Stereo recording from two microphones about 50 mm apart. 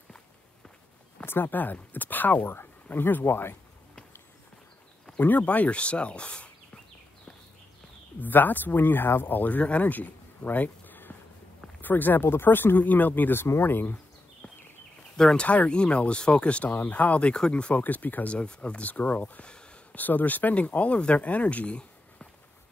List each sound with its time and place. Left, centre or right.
1.2 s speech: left
5.1 s speech: left
8.2 s speech: left
15.1 s speech: centre
15.4 s speech: left
20.0 s speech: left